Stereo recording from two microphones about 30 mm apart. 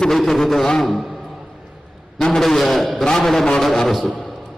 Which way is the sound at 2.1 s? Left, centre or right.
Centre.